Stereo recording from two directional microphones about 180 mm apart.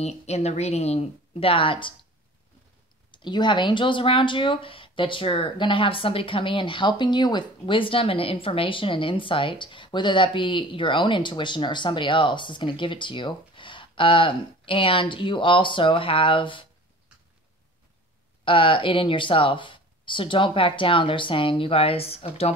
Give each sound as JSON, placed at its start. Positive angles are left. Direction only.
{"t": 0.0, "sound": "speech", "side_deg": 35}
{"t": 3.1, "sound": "speech", "side_deg": 25}
{"t": 18.4, "sound": "speech", "side_deg": 30}